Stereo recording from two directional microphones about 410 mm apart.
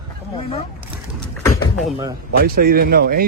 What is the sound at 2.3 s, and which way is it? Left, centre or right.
Speech, right.